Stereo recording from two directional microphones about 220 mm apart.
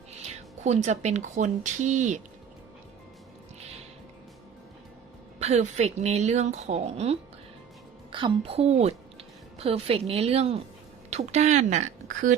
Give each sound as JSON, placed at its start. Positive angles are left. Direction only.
{"t": 0.6, "sound": "speech", "side_deg": -30}
{"t": 5.4, "sound": "speech", "side_deg": -30}